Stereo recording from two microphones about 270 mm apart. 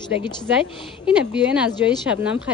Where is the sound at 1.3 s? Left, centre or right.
Centre.